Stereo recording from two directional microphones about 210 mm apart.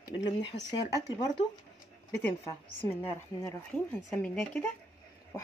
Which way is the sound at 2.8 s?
10° left (ahead or behind).